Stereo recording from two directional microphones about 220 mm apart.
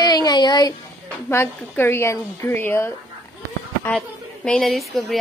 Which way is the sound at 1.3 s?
10° left (ahead or behind).